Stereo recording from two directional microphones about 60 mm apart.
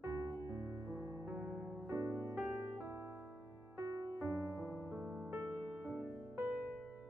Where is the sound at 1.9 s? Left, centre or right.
Right.